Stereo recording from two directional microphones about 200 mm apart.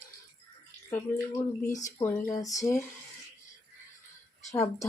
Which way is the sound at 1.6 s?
15° left (ahead or behind).